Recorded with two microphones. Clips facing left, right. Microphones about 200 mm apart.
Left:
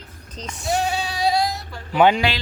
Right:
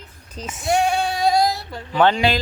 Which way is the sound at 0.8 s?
55° right (ahead or behind).